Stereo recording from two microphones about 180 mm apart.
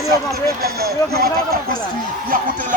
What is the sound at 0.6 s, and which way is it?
Speech, 60° right (ahead or behind).